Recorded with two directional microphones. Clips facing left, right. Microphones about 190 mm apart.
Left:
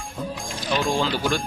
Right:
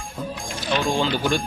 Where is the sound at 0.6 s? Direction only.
Centre (ahead or behind).